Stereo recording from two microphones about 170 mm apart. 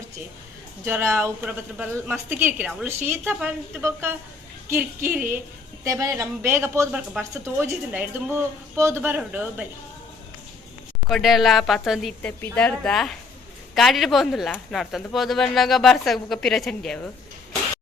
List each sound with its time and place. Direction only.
0.9 s a woman's voice: 15° right (ahead or behind)
11.1 s a woman's voice: centre (ahead or behind)